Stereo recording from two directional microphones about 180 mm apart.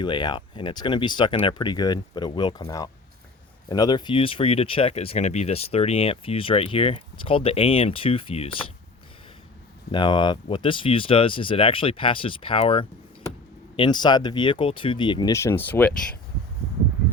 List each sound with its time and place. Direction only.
0.0 s speech: 25° left (ahead or behind)
9.9 s speech: 25° left (ahead or behind)